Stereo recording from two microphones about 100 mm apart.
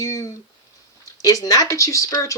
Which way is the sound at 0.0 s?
35° left (ahead or behind).